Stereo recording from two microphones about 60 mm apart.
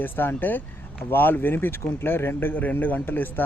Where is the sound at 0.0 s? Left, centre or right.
Left.